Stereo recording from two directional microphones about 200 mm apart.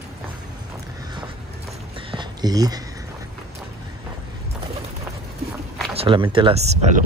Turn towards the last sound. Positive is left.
turn(degrees=-35)  # may be behind; listen again after turning